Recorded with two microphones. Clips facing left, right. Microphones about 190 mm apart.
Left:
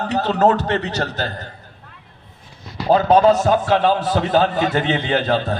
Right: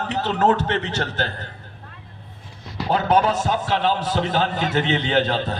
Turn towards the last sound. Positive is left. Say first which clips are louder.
# left 2 dB
turn(degrees=45)  # may be behind; listen again after turning